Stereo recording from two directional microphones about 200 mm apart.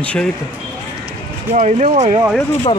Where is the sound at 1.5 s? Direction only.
35° right (ahead or behind).